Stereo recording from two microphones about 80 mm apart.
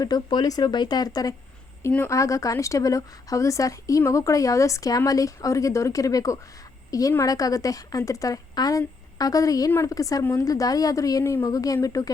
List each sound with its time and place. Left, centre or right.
0.0 s speech: left
2.0 s speech: left